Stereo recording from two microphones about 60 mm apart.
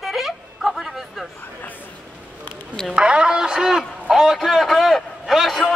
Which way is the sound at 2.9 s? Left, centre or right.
Centre.